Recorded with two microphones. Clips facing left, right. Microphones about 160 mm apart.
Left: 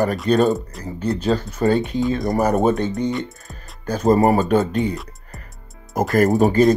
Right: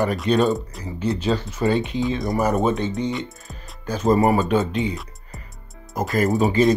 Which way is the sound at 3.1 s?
Centre (ahead or behind).